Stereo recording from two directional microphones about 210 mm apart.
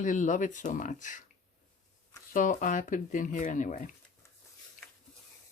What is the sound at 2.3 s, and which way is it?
Speech, 40° left (ahead or behind).